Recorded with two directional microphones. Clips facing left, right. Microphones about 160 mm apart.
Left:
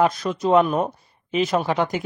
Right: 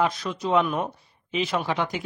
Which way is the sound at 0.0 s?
45° left (ahead or behind).